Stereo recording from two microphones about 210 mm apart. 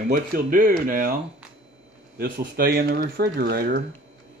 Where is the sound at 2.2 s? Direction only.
45° right (ahead or behind).